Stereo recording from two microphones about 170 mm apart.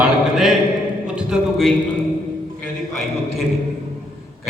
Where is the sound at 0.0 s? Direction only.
Centre (ahead or behind).